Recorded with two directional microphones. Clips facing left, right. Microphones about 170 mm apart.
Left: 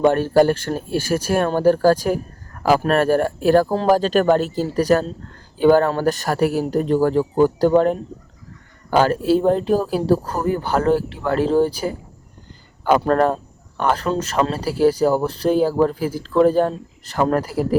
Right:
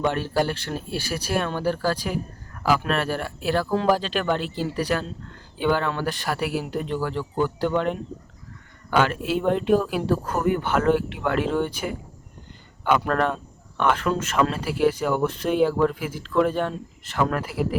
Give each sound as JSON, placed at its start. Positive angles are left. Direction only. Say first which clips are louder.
{"t": 0.0, "sound": "speech", "louder": "left 9 dB", "side_deg": 45}